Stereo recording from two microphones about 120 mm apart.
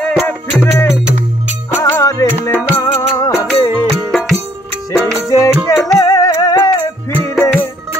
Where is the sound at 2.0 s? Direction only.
30° left (ahead or behind).